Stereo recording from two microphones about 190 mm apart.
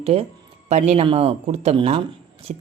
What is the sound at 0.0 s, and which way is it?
Speech, 30° right (ahead or behind).